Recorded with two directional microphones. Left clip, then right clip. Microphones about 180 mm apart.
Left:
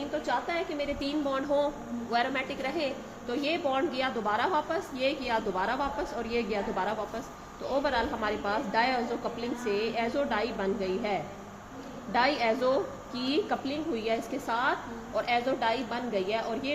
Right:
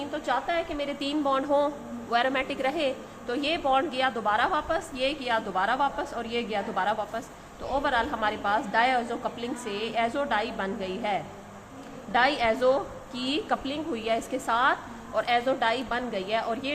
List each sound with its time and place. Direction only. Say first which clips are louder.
0.1 s a woman's voice: right 3 dB; 30° right (ahead or behind)